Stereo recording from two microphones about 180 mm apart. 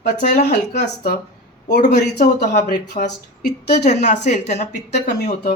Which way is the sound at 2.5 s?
45° left (ahead or behind).